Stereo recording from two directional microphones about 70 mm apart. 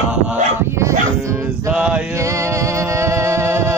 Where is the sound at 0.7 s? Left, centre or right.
Right.